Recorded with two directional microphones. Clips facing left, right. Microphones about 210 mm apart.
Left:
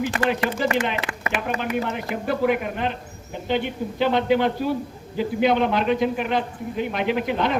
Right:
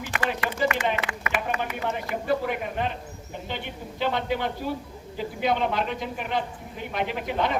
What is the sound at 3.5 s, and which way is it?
A man's voice, 90° left.